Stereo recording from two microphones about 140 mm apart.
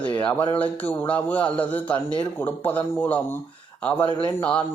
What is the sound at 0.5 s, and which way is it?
Speech, 10° left (ahead or behind).